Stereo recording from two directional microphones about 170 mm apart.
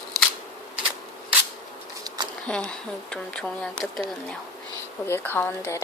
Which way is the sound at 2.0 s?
25° right (ahead or behind).